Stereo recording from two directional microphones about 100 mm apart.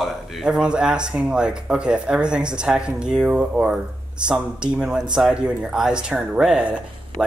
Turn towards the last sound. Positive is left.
turn(degrees=-10)  # may be behind; listen again after turning